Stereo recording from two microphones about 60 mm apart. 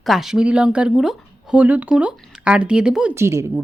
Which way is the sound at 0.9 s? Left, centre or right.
Centre.